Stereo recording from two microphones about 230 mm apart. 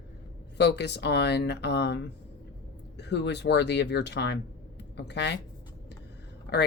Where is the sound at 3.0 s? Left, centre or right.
Left.